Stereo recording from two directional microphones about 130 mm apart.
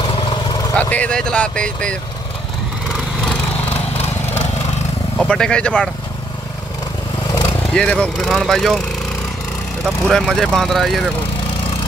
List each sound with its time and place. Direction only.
0.0 s vehicle: 35° left (ahead or behind)
0.7 s speech: 10° left (ahead or behind)
5.2 s speech: 5° left (ahead or behind)
7.7 s speech: 10° left (ahead or behind)
9.8 s speech: centre (ahead or behind)